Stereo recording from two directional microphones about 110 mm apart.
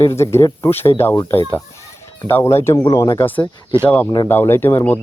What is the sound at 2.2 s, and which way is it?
Speech, 25° left (ahead or behind).